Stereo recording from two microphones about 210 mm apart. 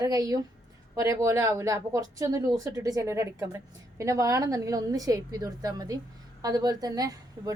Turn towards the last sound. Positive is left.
turn(degrees=-15)  # may be behind; listen again after turning